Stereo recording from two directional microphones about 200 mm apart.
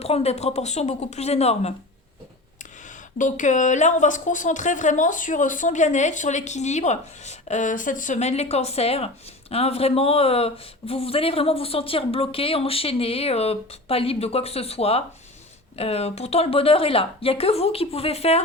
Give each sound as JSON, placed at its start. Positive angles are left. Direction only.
{"t": 0.0, "sound": "speech", "side_deg": 30}
{"t": 3.2, "sound": "speech", "side_deg": 40}